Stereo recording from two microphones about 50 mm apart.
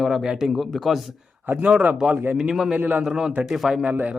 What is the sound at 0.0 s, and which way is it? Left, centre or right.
Speech, centre.